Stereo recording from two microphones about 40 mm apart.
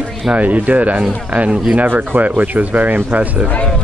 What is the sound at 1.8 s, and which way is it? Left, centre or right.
Speech, right.